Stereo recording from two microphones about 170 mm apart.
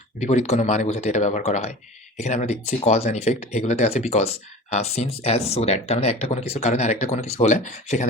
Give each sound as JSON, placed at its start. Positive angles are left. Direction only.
{"t": 0.2, "sound": "speech", "side_deg": 45}